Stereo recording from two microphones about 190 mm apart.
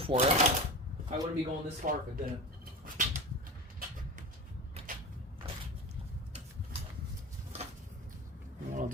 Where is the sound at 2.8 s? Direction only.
40° right (ahead or behind).